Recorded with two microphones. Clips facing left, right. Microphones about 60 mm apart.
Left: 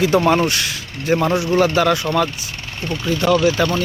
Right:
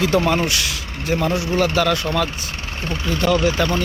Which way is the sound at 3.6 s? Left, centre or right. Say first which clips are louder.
Left 2 dB; centre.